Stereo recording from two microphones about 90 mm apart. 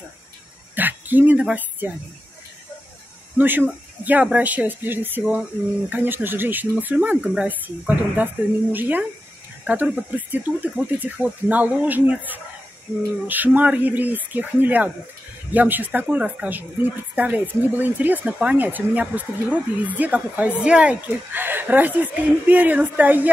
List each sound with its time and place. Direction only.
0.7 s speech: 20° right (ahead or behind)
3.3 s a woman's voice: 20° right (ahead or behind)
21.3 s speech: 20° right (ahead or behind)